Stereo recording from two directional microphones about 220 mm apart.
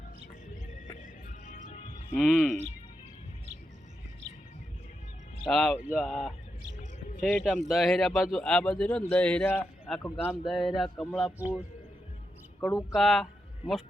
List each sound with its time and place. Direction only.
1.5 s music: 35° left (ahead or behind)
2.1 s a man's voice: centre (ahead or behind)
5.5 s a man's voice: centre (ahead or behind)
12.5 s a man's voice: 10° left (ahead or behind)